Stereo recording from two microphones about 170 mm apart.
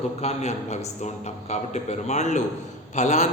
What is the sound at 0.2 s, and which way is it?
A man's voice, 40° left (ahead or behind).